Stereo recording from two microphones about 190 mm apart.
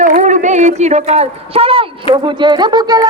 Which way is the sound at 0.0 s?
40° right (ahead or behind).